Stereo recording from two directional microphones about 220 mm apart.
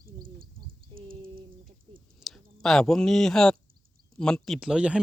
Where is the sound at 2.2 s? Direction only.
Centre (ahead or behind).